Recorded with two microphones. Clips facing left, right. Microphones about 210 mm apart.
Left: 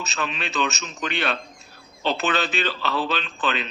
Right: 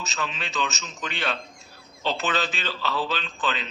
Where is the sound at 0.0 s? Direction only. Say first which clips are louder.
Left 3 dB; 65° left (ahead or behind).